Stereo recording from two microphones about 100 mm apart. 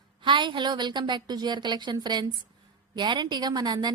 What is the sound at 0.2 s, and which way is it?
A woman's voice, 55° right (ahead or behind).